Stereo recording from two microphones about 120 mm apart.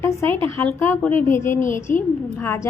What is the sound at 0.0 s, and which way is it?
Speech, 20° left (ahead or behind).